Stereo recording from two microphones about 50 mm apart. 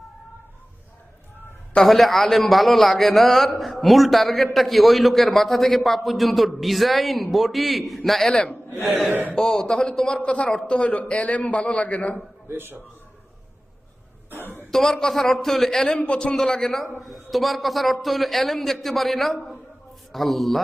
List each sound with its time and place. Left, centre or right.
1.8 s a man's voice: centre
10.2 s a man's voice: left
12.5 s a man's voice: right
14.7 s speech: centre
16.0 s a man's voice: left; by 20.6 s centre